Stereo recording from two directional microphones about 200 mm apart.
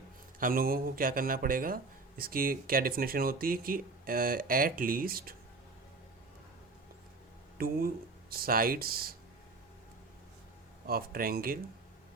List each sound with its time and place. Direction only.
0.3 s speech: 45° right (ahead or behind)
7.6 s speech: 50° right (ahead or behind)
10.8 s speech: 50° right (ahead or behind)